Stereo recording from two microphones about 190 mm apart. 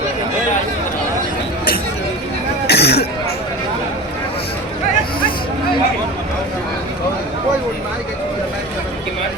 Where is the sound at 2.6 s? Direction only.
60° left (ahead or behind).